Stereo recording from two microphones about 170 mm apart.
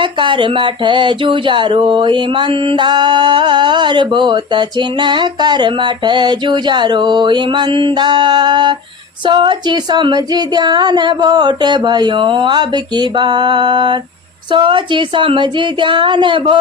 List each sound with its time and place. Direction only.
0.0 s speech: 30° right (ahead or behind)